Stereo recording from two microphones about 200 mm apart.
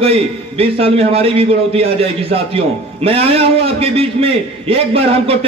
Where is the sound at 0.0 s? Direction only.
30° right (ahead or behind).